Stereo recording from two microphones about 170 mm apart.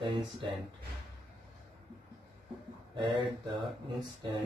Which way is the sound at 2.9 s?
30° right (ahead or behind).